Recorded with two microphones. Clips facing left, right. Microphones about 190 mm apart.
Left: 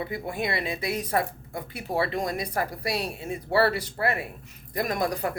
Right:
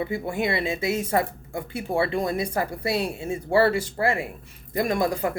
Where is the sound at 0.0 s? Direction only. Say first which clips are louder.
Right 4 dB; 25° right (ahead or behind).